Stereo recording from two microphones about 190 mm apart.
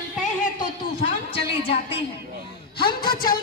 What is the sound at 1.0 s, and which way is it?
Speech, 30° left (ahead or behind).